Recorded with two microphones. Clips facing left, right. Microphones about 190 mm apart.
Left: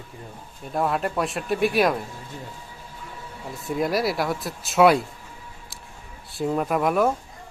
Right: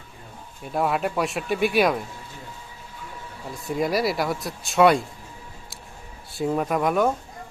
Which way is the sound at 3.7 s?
Centre (ahead or behind).